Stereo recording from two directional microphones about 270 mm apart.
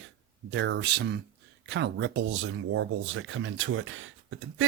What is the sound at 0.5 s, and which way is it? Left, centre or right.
Speech, right.